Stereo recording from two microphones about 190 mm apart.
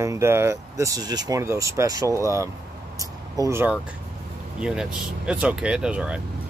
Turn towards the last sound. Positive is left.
turn(degrees=-5)  # may be behind; listen again after turning